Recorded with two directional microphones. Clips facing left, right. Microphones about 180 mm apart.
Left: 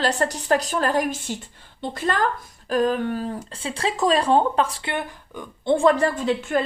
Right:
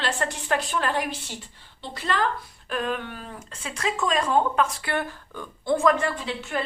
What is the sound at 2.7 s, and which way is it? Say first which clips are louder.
A woman's voice: left 8 dB; 35° left (ahead or behind).